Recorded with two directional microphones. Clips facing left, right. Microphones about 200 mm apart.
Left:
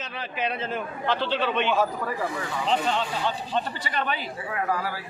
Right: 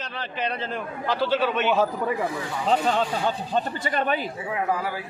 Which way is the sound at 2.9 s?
45° right (ahead or behind).